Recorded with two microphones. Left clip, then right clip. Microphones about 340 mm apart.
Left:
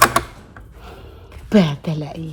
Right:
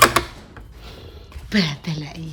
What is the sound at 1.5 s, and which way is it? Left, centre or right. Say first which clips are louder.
Speech: left 5 dB; centre.